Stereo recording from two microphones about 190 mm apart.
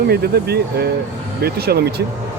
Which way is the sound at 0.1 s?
55° right (ahead or behind).